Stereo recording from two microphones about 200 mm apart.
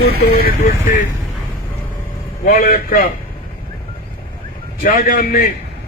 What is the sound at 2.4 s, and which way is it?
Speech, 45° left (ahead or behind).